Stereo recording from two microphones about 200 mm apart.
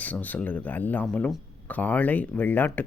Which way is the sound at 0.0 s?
10° left (ahead or behind).